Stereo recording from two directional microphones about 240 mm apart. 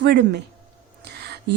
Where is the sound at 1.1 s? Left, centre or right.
Right.